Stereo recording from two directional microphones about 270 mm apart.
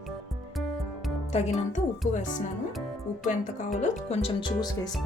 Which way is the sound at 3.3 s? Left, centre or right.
Left.